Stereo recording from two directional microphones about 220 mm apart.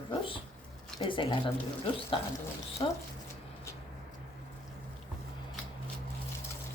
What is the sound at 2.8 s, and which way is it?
Speech, 20° left (ahead or behind).